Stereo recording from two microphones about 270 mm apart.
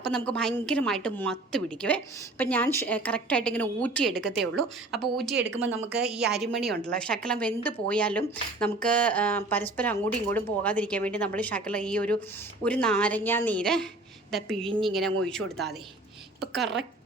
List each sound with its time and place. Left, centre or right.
0.0 s speech: centre
5.3 s speech: right
6.8 s speech: centre